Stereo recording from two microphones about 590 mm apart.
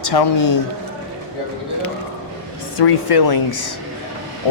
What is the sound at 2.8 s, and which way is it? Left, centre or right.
Speech, left.